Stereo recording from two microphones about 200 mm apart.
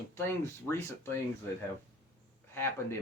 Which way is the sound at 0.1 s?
10° left (ahead or behind).